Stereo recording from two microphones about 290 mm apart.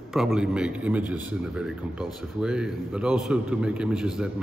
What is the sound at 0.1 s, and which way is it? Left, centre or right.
A man's voice, centre.